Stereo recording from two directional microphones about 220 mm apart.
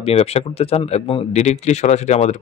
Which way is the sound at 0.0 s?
30° left (ahead or behind).